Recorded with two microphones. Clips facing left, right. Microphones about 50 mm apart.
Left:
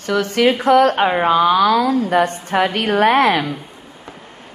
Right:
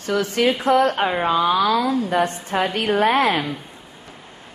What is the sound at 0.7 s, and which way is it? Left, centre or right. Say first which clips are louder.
Speech: left 6 dB; left.